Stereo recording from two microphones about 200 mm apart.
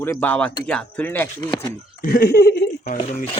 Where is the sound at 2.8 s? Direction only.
40° left (ahead or behind).